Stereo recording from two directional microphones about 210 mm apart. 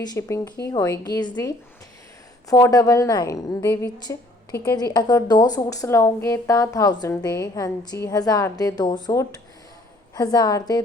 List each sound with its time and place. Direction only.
0.0 s a woman's voice: 15° left (ahead or behind)